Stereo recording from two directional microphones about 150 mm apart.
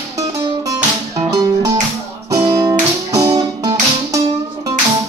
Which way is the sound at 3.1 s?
20° right (ahead or behind).